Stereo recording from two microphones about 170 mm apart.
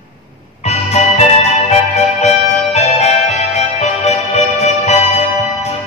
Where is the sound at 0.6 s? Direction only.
40° left (ahead or behind).